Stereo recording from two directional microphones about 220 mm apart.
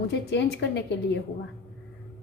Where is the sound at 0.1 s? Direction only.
55° left (ahead or behind).